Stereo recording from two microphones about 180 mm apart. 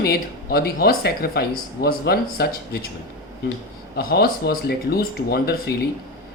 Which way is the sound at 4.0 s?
55° left (ahead or behind).